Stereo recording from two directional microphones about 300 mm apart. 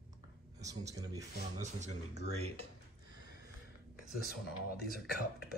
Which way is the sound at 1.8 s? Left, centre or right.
Right.